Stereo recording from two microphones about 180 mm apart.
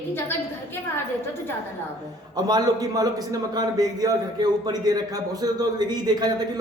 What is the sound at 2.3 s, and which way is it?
A man's voice, 20° right (ahead or behind).